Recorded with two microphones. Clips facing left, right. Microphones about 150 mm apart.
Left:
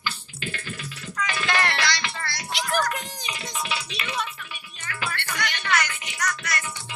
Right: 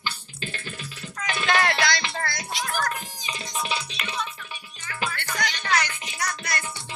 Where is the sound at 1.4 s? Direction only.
50° right (ahead or behind).